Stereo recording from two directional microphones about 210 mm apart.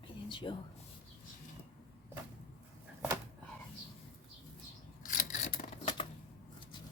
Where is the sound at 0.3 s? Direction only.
20° left (ahead or behind).